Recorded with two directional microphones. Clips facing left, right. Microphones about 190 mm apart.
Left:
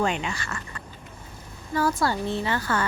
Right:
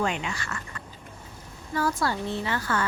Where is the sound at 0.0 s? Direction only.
30° left (ahead or behind).